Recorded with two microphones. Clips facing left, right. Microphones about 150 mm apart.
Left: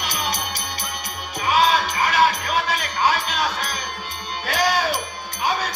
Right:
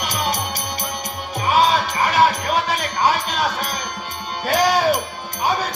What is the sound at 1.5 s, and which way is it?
Music, 40° right (ahead or behind).